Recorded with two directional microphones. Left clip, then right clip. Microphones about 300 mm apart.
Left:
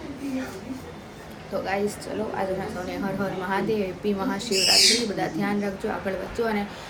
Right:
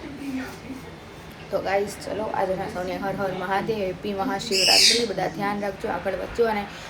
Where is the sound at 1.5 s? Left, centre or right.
Centre.